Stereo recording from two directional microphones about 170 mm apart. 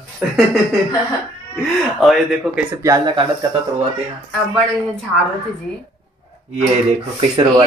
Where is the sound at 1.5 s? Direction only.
Centre (ahead or behind).